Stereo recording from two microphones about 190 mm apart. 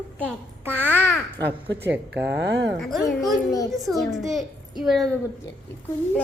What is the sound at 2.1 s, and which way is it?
Speech, 70° right (ahead or behind).